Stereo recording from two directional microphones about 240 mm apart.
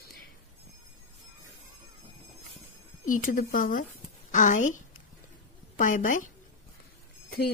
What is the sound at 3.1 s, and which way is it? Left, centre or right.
Speech, left.